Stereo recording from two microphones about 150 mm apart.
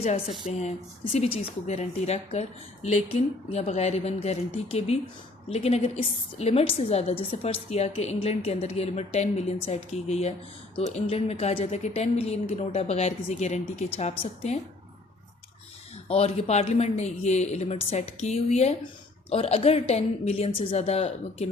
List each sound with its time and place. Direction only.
0.0 s speech: 45° left (ahead or behind)
16.0 s a woman's voice: 45° left (ahead or behind)